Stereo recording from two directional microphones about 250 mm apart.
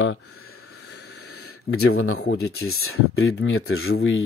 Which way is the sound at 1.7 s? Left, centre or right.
Left.